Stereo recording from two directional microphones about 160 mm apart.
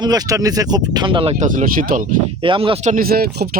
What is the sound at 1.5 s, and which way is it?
Speech, 60° right (ahead or behind).